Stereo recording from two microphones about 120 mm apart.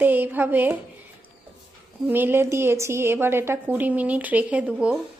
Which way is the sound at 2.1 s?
20° right (ahead or behind).